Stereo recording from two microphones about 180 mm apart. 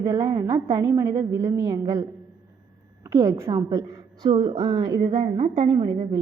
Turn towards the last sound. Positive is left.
turn(degrees=-25)  # may be behind; listen again after turning